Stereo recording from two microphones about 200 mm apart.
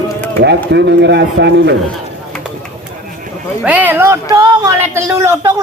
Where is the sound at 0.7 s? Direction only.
60° right (ahead or behind).